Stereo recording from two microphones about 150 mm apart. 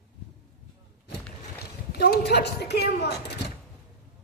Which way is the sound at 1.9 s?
90° left.